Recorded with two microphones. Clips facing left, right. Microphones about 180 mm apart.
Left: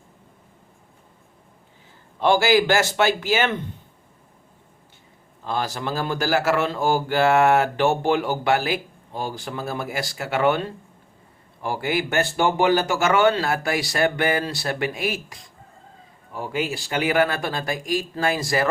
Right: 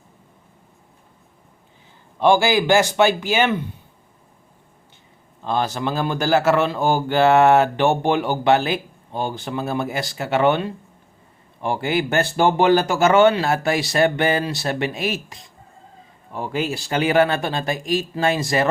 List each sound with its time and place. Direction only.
2.2 s speech: 15° right (ahead or behind)
5.5 s a man's voice: 20° right (ahead or behind)
16.9 s a man's voice: 30° right (ahead or behind)